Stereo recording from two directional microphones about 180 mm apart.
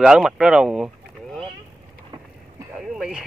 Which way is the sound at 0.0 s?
5° right (ahead or behind).